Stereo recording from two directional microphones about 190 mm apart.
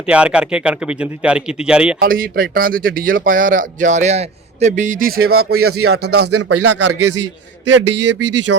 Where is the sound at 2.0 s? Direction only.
50° right (ahead or behind).